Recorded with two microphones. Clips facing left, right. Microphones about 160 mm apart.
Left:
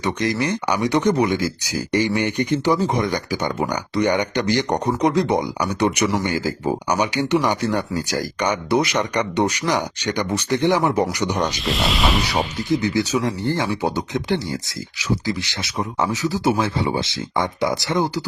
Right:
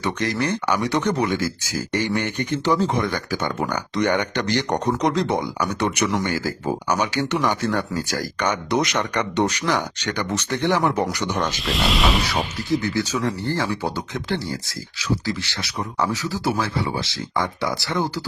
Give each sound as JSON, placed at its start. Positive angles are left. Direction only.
{"t": 0.0, "sound": "speech", "side_deg": 15}
{"t": 11.3, "sound": "speech", "side_deg": 0}
{"t": 12.3, "sound": "speech", "side_deg": 20}